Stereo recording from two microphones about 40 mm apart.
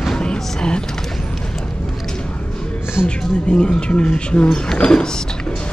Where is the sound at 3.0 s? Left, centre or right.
Left.